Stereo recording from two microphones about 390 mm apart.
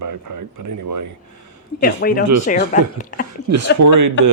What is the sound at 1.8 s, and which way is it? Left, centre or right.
Speech, left.